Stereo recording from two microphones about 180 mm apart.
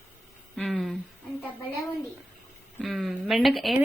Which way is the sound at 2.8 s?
Centre (ahead or behind).